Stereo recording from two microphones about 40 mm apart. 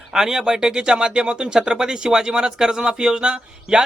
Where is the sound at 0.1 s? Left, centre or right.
Centre.